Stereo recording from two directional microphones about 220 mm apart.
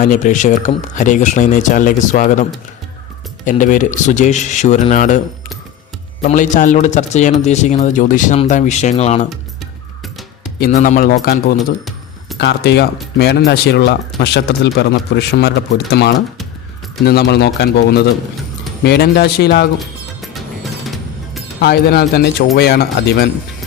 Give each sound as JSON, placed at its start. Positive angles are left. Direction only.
{"t": 0.0, "sound": "speech", "side_deg": 35}
{"t": 6.2, "sound": "speech", "side_deg": 35}
{"t": 9.3, "sound": "music", "side_deg": 0}
{"t": 10.6, "sound": "speech", "side_deg": 35}
{"t": 20.8, "sound": "music", "side_deg": 0}
{"t": 21.6, "sound": "speech", "side_deg": 45}